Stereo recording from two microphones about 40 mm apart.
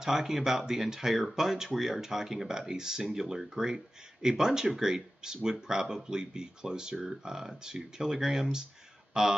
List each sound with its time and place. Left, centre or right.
0.0 s speech: centre